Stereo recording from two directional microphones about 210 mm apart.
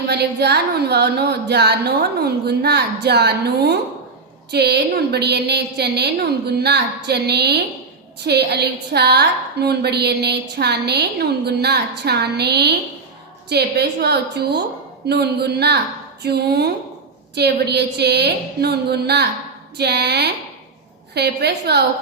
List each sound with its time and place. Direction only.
0.1 s a woman's voice: 50° right (ahead or behind)